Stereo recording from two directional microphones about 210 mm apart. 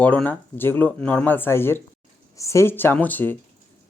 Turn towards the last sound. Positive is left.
turn(degrees=10)  # may be behind; listen again after turning